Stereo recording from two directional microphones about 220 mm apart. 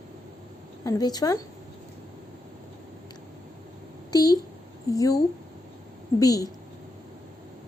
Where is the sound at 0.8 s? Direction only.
15° left (ahead or behind).